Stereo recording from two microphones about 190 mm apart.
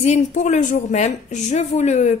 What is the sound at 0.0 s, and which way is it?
A woman's voice, 40° left (ahead or behind).